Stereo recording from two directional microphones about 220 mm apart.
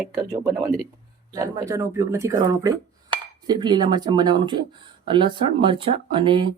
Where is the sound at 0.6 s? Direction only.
15° right (ahead or behind).